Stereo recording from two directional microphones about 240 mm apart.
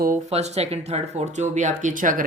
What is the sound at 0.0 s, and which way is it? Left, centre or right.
Speech, right.